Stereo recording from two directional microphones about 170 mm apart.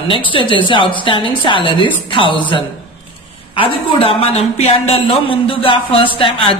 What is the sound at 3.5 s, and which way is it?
A man's voice, 30° left (ahead or behind).